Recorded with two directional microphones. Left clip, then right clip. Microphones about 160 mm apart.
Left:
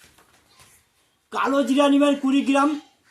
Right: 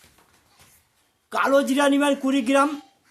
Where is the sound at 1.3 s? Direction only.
20° right (ahead or behind).